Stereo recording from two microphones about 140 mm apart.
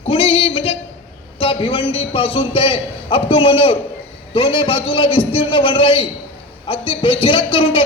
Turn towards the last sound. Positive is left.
turn(degrees=40)  # may be behind; listen again after turning